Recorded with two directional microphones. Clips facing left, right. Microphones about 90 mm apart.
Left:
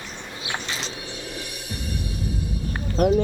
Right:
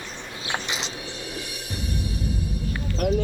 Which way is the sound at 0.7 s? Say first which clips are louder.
Even; 20° right (ahead or behind).